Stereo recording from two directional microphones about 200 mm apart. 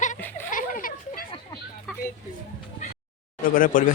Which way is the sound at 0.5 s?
45° left (ahead or behind).